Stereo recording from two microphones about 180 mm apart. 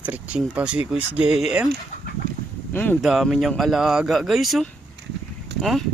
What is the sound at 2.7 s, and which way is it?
Speech, 10° left (ahead or behind).